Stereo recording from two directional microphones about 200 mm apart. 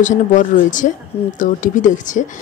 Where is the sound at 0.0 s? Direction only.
40° left (ahead or behind).